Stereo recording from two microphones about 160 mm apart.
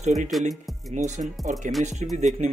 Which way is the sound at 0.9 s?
50° right (ahead or behind).